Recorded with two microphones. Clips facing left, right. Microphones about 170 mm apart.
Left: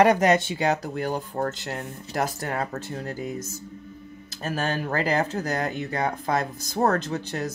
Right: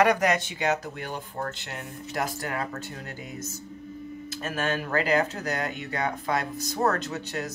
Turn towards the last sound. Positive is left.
turn(degrees=35)  # may be behind; listen again after turning